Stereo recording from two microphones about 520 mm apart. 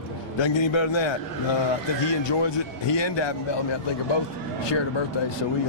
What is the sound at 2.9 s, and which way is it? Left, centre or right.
Speech, left.